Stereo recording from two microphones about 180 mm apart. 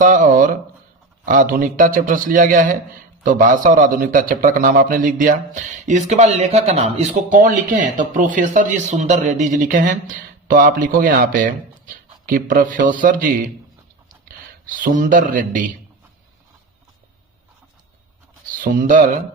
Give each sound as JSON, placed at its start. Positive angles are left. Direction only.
{"t": 0.0, "sound": "a man's voice", "side_deg": -45}
{"t": 14.8, "sound": "a man's voice", "side_deg": -50}
{"t": 18.6, "sound": "a man's voice", "side_deg": -50}